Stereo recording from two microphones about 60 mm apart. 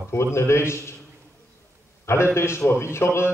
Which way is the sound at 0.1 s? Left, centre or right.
Left.